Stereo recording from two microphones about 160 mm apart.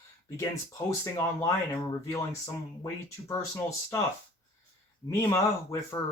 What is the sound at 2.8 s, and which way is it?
Speech, 20° left (ahead or behind).